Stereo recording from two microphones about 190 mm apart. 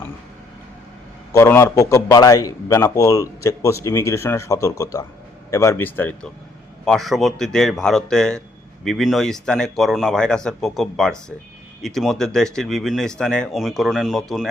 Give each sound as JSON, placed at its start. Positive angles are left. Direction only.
{"t": 1.3, "sound": "a man's voice", "side_deg": 15}